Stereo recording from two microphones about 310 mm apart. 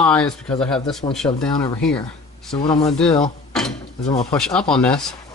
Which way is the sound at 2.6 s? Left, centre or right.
Centre.